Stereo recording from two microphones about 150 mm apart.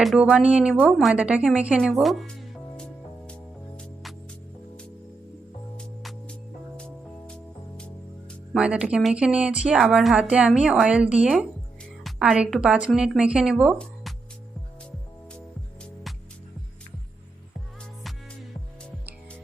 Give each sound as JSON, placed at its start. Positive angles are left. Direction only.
{"t": 0.0, "sound": "a sound", "side_deg": 0}
{"t": 5.7, "sound": "music", "side_deg": 5}
{"t": 8.5, "sound": "a woman's voice", "side_deg": -5}
{"t": 11.3, "sound": "music", "side_deg": 5}
{"t": 12.2, "sound": "a woman's voice", "side_deg": -5}